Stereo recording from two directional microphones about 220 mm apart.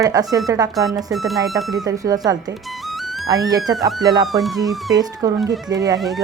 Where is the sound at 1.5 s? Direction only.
15° right (ahead or behind).